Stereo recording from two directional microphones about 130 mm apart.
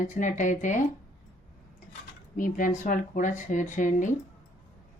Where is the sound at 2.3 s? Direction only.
90° left; by 4.1 s 75° left (ahead or behind).